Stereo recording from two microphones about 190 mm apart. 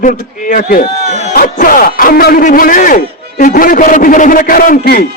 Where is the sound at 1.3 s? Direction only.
45° left (ahead or behind).